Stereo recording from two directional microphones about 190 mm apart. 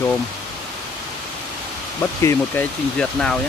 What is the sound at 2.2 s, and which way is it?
Speech, 10° left (ahead or behind).